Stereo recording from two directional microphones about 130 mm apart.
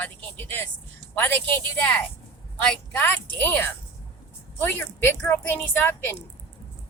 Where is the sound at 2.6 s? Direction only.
10° left (ahead or behind).